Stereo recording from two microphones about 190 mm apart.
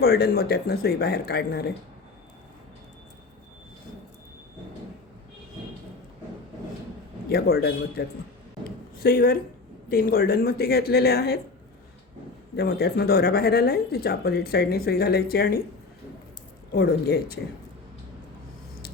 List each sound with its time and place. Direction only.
0.0 s speech: 55° left (ahead or behind)
7.3 s speech: 55° left (ahead or behind)
9.0 s speech: 50° left (ahead or behind)
12.5 s speech: 55° left (ahead or behind)
16.7 s speech: 55° left (ahead or behind)